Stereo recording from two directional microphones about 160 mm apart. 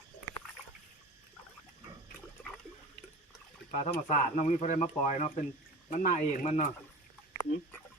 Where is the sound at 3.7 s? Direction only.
45° left (ahead or behind).